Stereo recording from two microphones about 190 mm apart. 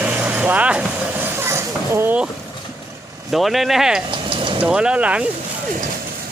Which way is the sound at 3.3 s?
Centre (ahead or behind).